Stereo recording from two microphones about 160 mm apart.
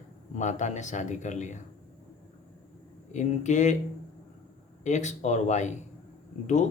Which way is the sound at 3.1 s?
45° left (ahead or behind).